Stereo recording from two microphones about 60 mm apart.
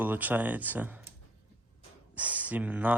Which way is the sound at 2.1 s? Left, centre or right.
Right.